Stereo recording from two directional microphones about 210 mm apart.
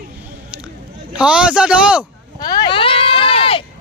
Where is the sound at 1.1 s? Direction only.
5° right (ahead or behind).